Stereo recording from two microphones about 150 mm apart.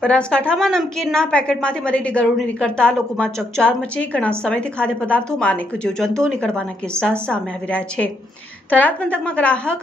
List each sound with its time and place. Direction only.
0.0 s a woman's voice: 5° left (ahead or behind)